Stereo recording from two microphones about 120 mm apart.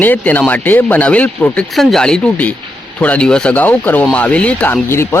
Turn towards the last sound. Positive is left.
turn(degrees=20)  # may be behind; listen again after turning